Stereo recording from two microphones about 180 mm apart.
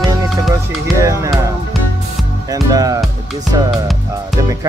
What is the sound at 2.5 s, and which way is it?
Music, 20° right (ahead or behind).